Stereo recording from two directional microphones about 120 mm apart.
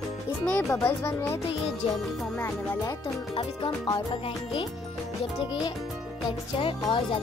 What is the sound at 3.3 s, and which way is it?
Music, 45° left (ahead or behind).